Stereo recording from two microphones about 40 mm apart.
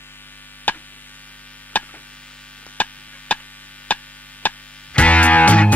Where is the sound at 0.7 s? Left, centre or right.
Left.